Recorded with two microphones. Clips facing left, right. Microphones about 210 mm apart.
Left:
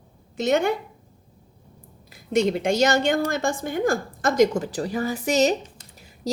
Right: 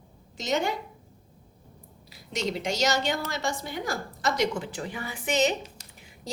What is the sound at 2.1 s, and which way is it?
A woman's voice, 55° left (ahead or behind).